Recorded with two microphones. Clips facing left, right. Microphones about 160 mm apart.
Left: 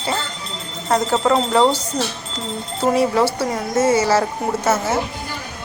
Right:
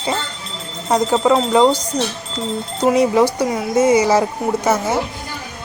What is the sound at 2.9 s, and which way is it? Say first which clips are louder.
Speech: right 3 dB; 15° right (ahead or behind).